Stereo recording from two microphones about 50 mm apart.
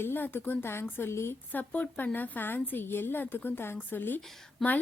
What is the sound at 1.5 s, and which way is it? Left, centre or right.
A woman's voice, left.